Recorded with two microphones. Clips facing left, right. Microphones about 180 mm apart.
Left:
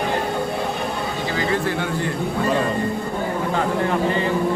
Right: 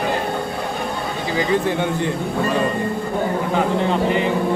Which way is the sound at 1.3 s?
20° right (ahead or behind).